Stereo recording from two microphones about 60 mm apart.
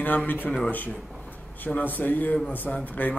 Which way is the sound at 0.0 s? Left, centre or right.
Left.